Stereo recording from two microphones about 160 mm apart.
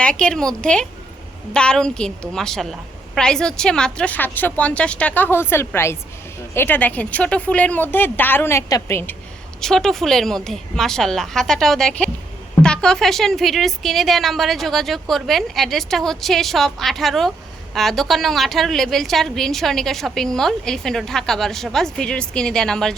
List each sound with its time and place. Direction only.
0.0 s a woman's voice: 5° left (ahead or behind)
9.6 s a woman's voice: 5° left (ahead or behind)